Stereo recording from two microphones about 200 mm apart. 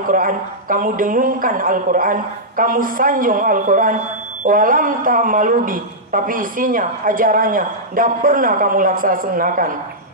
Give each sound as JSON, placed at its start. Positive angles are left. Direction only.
{"t": 0.0, "sound": "a man's voice", "side_deg": -45}